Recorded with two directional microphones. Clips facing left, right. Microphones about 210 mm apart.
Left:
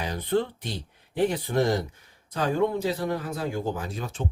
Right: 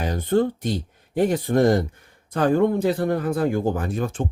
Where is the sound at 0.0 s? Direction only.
45° right (ahead or behind).